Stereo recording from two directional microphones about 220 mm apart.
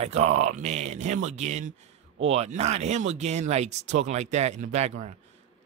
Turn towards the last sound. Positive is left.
turn(degrees=-30)  # may be behind; listen again after turning